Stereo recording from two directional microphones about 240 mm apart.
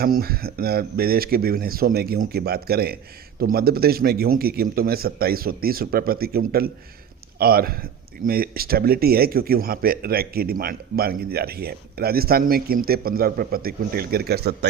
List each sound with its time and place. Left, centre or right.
0.0 s a man's voice: right